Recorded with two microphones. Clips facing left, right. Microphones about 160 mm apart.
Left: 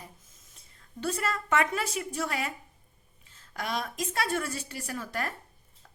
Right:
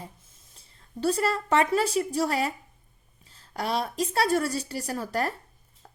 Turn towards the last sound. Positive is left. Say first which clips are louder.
# right 6 dB
turn(degrees=-35)  # may be behind; listen again after turning